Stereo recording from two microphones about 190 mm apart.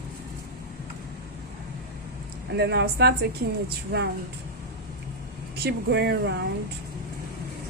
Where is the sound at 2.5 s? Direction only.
60° right (ahead or behind).